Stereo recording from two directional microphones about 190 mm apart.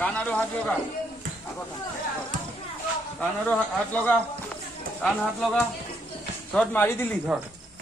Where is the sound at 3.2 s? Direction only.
5° left (ahead or behind).